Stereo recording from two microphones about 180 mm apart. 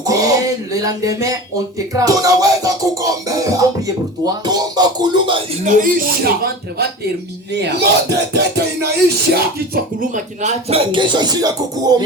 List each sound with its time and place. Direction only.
0.0 s a sound: 20° right (ahead or behind)
1.9 s music: 20° right (ahead or behind)
5.6 s speech: 45° right (ahead or behind)
7.5 s speech: 70° right (ahead or behind)
9.3 s music: 50° right (ahead or behind); by 12.0 s 20° right (ahead or behind)